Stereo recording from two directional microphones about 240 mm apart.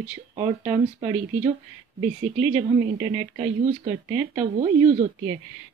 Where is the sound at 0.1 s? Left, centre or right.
Right.